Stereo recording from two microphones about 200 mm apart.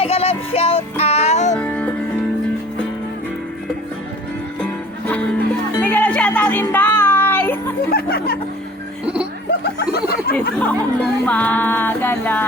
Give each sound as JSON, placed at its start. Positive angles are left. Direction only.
{"t": 0.0, "sound": "music", "side_deg": 30}
{"t": 1.5, "sound": "music", "side_deg": 5}
{"t": 4.6, "sound": "music", "side_deg": 5}
{"t": 7.9, "sound": "music", "side_deg": 50}
{"t": 9.7, "sound": "a sound", "side_deg": 50}
{"t": 10.6, "sound": "music", "side_deg": 5}